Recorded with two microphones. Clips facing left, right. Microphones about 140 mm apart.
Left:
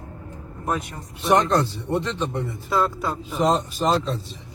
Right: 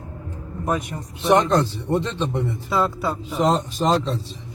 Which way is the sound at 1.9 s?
10° left (ahead or behind).